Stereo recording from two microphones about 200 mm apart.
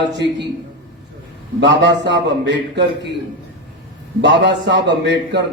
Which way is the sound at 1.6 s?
60° right (ahead or behind).